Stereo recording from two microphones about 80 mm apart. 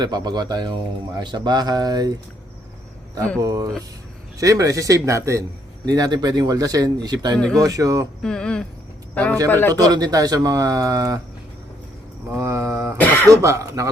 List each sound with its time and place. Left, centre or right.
0.0 s speech: right
3.4 s speech: right
5.8 s speech: right
7.6 s speech: right
8.2 s a sound: centre
9.1 s speech: centre
9.7 s speech: right
12.3 s speech: right
13.0 s throat clearing: left
13.3 s speech: right